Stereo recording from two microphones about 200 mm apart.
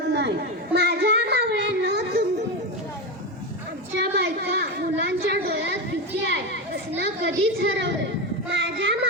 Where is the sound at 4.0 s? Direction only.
55° right (ahead or behind).